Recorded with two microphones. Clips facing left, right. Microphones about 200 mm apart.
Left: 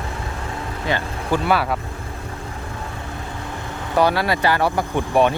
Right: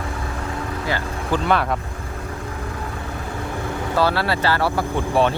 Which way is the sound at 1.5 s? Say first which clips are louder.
Right 1 dB; 5° left (ahead or behind).